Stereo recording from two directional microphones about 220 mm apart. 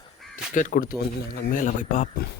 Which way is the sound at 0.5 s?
35° left (ahead or behind).